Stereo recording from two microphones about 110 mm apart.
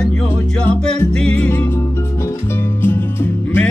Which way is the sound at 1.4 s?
20° left (ahead or behind).